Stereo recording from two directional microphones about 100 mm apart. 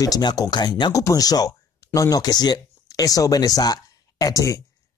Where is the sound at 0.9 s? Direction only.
35° left (ahead or behind).